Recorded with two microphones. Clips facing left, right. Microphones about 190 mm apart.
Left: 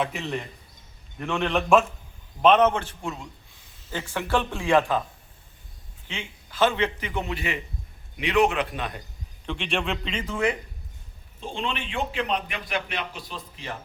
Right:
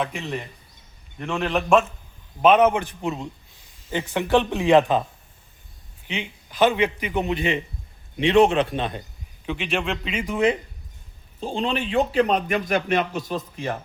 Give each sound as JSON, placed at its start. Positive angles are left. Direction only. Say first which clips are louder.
{"t": 0.0, "sound": "a man's voice", "louder": "right 1 dB", "side_deg": 0}
{"t": 6.1, "sound": "a man's voice", "louder": "right 6 dB", "side_deg": -15}
{"t": 9.5, "sound": "a man's voice", "louder": "right 2 dB", "side_deg": -5}
{"t": 11.3, "sound": "a man's voice", "louder": "right 6 dB", "side_deg": -35}